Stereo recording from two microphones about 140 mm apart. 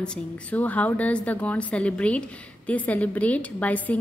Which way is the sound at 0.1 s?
10° left (ahead or behind).